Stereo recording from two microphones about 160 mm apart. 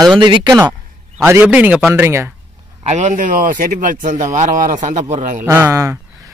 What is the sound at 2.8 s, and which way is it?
Speech, 45° right (ahead or behind).